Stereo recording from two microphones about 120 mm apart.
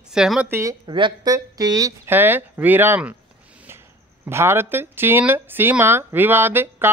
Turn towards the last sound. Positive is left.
turn(degrees=-20)  # may be behind; listen again after turning